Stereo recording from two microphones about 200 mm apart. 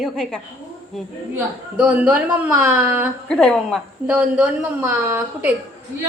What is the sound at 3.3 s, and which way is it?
Speech, 5° left (ahead or behind).